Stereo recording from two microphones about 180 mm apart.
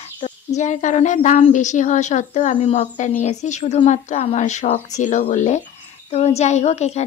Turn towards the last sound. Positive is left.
turn(degrees=40)  # may be behind; listen again after turning